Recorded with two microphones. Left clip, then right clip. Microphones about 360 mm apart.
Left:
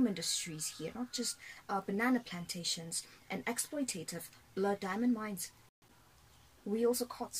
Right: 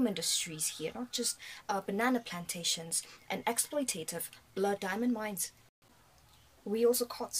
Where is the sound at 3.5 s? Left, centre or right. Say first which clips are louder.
Right 5 dB; right.